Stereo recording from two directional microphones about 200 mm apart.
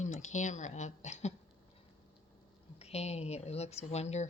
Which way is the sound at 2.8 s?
30° left (ahead or behind).